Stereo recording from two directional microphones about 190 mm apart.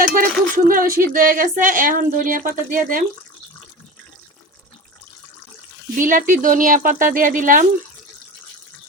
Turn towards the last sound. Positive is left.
turn(degrees=-45)  # may be behind; listen again after turning